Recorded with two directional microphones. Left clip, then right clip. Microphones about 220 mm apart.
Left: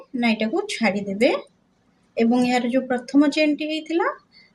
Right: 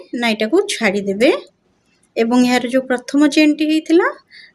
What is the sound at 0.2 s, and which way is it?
A woman's voice, 55° right (ahead or behind).